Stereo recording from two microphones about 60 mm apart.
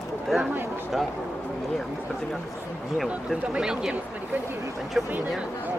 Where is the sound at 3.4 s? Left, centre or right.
Centre.